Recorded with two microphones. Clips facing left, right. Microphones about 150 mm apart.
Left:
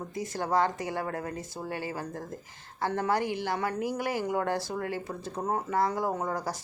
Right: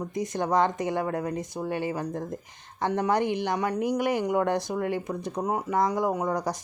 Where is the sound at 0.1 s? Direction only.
20° right (ahead or behind).